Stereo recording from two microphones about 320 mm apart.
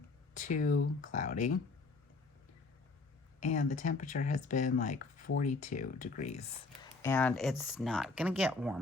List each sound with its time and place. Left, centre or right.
0.3 s speech: left
3.4 s speech: left
7.0 s speech: centre